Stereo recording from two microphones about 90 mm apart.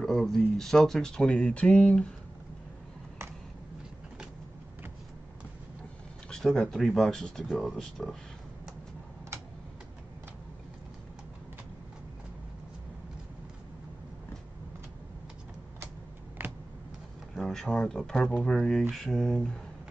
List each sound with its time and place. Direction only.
0.0 s speech: 5° left (ahead or behind)
6.3 s speech: 5° left (ahead or behind)
16.4 s vehicle: 25° right (ahead or behind)
17.4 s speech: 5° left (ahead or behind)